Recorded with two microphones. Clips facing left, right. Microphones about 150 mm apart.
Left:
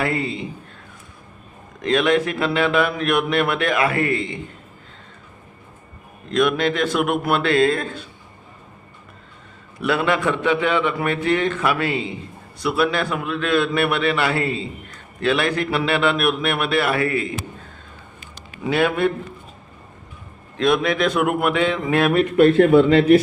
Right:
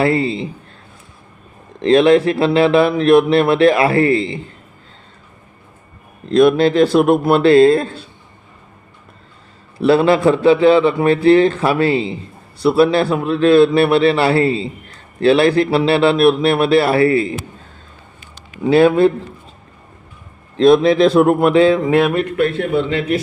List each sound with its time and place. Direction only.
0.0 s a man's voice: 30° right (ahead or behind)
1.8 s a man's voice: 30° right (ahead or behind)
6.2 s a man's voice: 30° right (ahead or behind)
9.7 s a man's voice: 30° right (ahead or behind)
18.6 s a man's voice: 30° right (ahead or behind)
20.6 s a man's voice: 30° right (ahead or behind)